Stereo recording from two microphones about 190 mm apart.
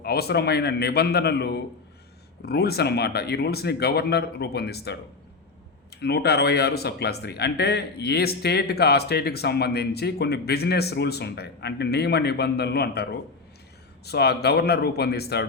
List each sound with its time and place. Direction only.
0.0 s speech: 55° left (ahead or behind)
6.0 s speech: 60° left (ahead or behind)